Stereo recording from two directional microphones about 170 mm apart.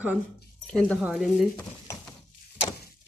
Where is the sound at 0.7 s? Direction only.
5° left (ahead or behind).